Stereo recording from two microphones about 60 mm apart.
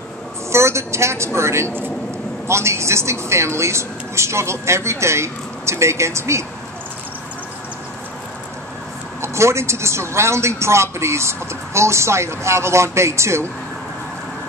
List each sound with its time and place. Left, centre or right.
0.5 s a woman's voice: right
9.2 s speech: right